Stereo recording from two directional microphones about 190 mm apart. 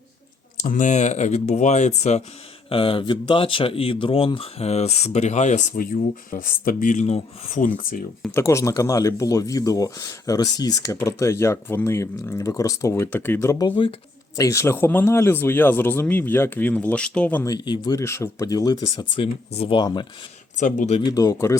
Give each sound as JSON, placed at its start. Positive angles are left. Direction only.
{"t": 0.6, "sound": "speech", "side_deg": 40}
{"t": 8.3, "sound": "speech", "side_deg": 15}
{"t": 20.6, "sound": "speech", "side_deg": 40}
{"t": 21.0, "sound": "speech", "side_deg": 20}